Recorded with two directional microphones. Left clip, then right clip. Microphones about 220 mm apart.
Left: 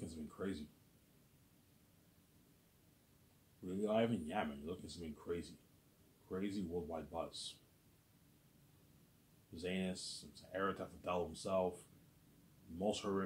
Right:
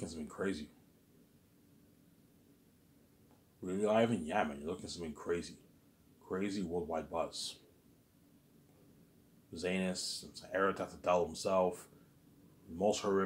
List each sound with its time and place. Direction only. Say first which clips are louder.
0.0 s a sound: right 7 dB; 25° right (ahead or behind)
3.6 s speech: right 6 dB; 25° right (ahead or behind)
9.5 s speech: right 6 dB; 25° right (ahead or behind)
12.7 s speech: right 7 dB; 25° right (ahead or behind)